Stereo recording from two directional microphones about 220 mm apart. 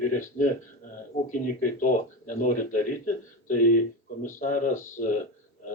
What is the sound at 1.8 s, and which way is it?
Speech, 35° left (ahead or behind).